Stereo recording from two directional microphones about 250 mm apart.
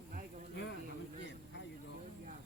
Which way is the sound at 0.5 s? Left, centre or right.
Left.